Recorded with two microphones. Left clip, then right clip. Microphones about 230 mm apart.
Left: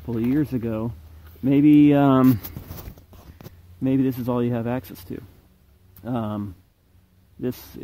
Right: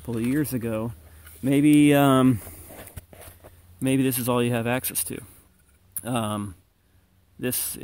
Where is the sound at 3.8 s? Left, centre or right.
Right.